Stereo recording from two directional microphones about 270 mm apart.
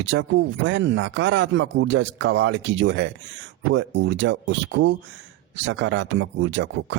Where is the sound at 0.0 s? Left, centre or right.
Right.